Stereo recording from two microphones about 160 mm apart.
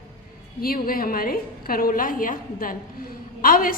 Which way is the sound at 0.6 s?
65° left (ahead or behind).